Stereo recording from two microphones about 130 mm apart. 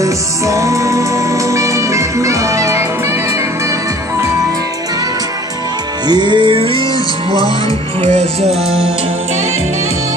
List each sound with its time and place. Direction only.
0.0 s music: 25° right (ahead or behind)
6.0 s music: 35° right (ahead or behind)
8.0 s music: 55° right (ahead or behind)